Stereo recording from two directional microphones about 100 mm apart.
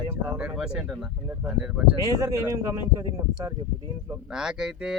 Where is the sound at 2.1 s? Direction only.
30° right (ahead or behind).